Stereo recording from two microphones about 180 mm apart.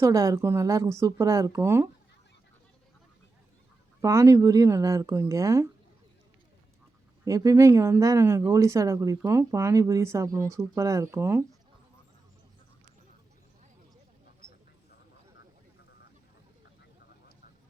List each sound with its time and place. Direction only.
0.0 s speech: 20° right (ahead or behind)
4.0 s speech: 15° right (ahead or behind)
7.3 s speech: 20° right (ahead or behind)